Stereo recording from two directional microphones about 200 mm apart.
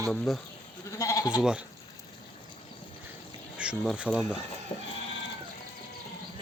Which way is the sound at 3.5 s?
5° right (ahead or behind).